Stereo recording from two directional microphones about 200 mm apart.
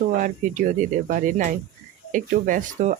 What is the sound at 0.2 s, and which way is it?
Speech, 40° right (ahead or behind).